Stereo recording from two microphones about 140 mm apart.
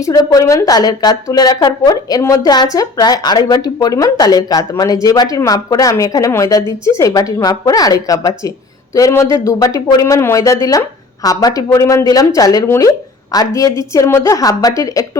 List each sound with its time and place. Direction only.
0.0 s a woman's voice: 25° left (ahead or behind)